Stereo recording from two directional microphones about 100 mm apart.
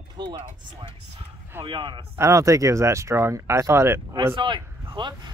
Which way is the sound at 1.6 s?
55° right (ahead or behind).